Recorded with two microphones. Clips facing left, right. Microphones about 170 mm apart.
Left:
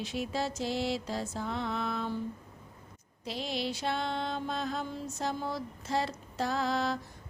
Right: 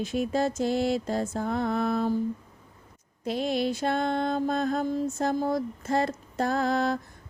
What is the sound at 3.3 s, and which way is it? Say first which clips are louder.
Mantra: right 8 dB; 50° right (ahead or behind).